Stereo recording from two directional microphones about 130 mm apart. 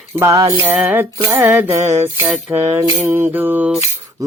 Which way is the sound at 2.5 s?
20° right (ahead or behind).